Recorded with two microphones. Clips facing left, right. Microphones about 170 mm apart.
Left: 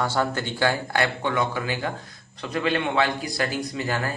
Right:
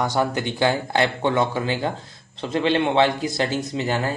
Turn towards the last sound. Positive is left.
turn(degrees=-25)  # may be behind; listen again after turning